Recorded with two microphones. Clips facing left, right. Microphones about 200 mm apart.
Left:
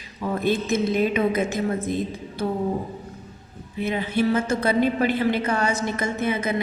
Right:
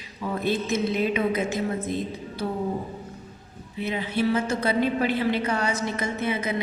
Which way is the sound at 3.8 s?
50° left (ahead or behind).